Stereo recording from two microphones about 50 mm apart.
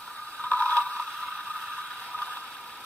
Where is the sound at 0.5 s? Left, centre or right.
Left.